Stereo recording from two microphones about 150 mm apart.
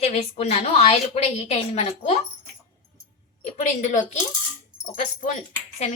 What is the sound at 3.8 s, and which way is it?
Speech, 55° left (ahead or behind).